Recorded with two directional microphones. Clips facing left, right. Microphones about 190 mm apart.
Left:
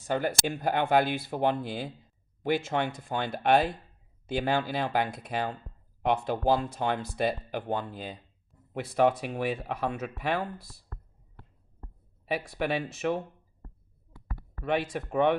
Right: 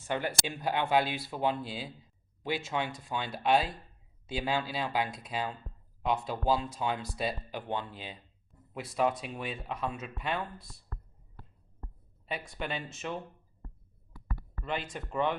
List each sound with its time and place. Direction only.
0.1 s speech: 45° left (ahead or behind)
9.0 s speech: 65° left (ahead or behind)
12.3 s speech: 70° left (ahead or behind)
14.3 s speech: 65° left (ahead or behind)